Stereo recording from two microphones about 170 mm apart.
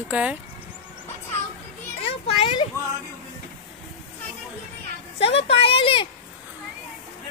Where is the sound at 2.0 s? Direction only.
35° left (ahead or behind).